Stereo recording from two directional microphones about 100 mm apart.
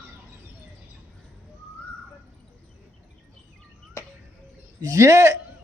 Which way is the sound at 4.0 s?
25° left (ahead or behind).